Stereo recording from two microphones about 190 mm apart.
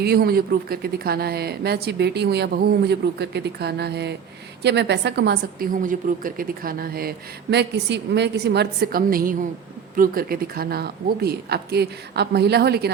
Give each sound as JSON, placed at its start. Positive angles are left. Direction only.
{"t": 0.0, "sound": "a woman's voice", "side_deg": -55}
{"t": 7.5, "sound": "speech", "side_deg": -60}